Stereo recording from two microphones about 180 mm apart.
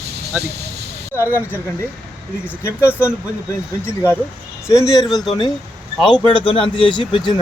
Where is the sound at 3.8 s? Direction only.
15° left (ahead or behind).